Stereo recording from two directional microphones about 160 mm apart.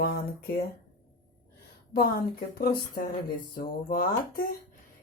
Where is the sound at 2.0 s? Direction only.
70° left (ahead or behind).